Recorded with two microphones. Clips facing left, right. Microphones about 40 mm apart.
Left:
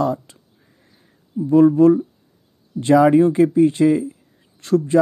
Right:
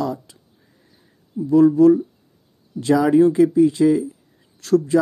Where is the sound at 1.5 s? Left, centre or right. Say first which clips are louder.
Even; left.